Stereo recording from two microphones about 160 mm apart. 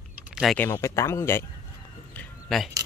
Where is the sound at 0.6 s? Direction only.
15° left (ahead or behind).